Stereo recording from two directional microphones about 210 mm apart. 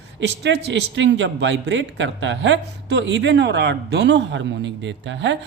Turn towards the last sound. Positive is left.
turn(degrees=-60)  # may be behind; listen again after turning